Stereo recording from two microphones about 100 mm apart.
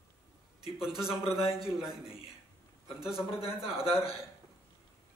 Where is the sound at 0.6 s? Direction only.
5° right (ahead or behind).